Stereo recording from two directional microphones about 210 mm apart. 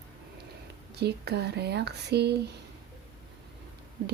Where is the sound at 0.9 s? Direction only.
50° right (ahead or behind).